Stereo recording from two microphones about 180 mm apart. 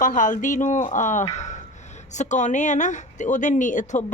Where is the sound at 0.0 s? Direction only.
45° left (ahead or behind).